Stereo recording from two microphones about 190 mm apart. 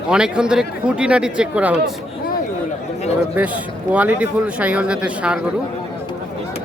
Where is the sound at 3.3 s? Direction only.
5° right (ahead or behind).